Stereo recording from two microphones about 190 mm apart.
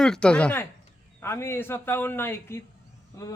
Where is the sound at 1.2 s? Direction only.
15° left (ahead or behind).